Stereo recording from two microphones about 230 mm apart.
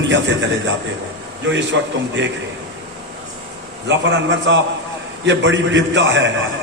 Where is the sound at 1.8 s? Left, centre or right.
Right.